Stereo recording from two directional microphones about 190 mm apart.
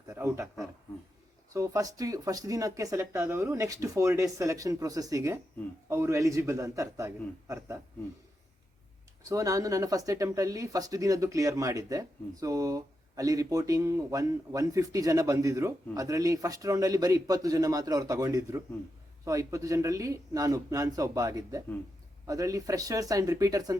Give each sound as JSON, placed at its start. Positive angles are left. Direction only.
{"t": 0.1, "sound": "a man's voice", "side_deg": -15}
{"t": 1.5, "sound": "speech", "side_deg": -15}
{"t": 9.3, "sound": "speech", "side_deg": -15}